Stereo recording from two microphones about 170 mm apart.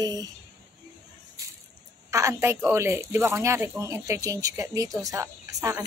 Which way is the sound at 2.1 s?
20° right (ahead or behind).